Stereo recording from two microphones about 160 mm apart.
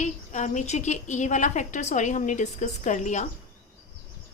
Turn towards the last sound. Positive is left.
turn(degrees=50)  # may be behind; listen again after turning